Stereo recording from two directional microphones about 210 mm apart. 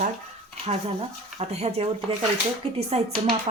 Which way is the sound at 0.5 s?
30° right (ahead or behind).